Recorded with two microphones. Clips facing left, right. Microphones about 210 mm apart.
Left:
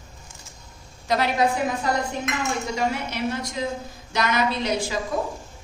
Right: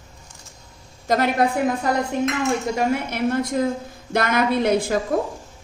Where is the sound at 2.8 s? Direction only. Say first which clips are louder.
Right 4 dB; 55° right (ahead or behind).